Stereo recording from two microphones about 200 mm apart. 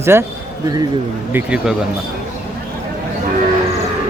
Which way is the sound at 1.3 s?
5° right (ahead or behind).